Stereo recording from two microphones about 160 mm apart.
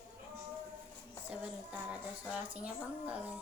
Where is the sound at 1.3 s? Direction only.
5° right (ahead or behind).